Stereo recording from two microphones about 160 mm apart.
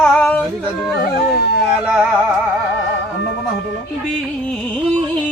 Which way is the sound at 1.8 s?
5° right (ahead or behind).